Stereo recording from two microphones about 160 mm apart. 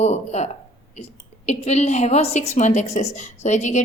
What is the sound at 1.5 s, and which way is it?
A woman's voice, 45° left (ahead or behind).